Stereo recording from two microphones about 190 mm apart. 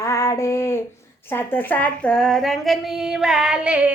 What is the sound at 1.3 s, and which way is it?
A woman's voice, 10° left (ahead or behind).